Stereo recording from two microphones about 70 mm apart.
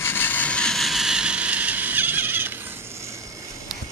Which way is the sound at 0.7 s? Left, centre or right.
Centre.